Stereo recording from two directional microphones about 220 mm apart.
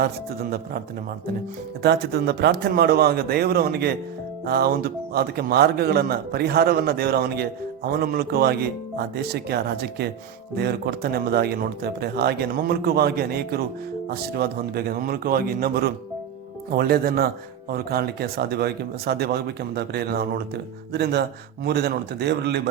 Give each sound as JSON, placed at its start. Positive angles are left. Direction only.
{"t": 0.0, "sound": "speech", "side_deg": -45}
{"t": 1.8, "sound": "speech", "side_deg": -45}